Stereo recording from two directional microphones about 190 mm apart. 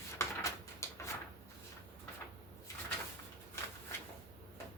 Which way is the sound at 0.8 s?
15° left (ahead or behind).